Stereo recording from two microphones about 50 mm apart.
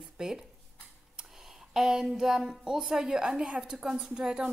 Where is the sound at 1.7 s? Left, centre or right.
Centre.